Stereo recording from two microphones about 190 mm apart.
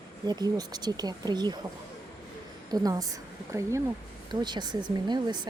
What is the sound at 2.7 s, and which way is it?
Speech, 20° right (ahead or behind).